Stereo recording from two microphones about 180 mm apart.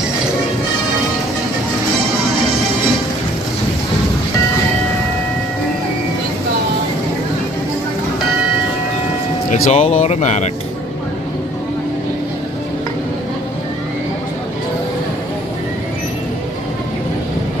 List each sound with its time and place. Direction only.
9.5 s speech: 40° left (ahead or behind)